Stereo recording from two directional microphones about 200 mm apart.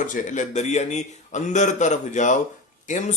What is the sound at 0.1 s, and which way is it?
Speech, 40° left (ahead or behind).